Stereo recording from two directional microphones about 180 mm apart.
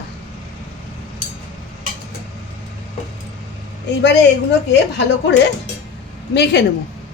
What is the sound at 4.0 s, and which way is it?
Speech, 70° left (ahead or behind).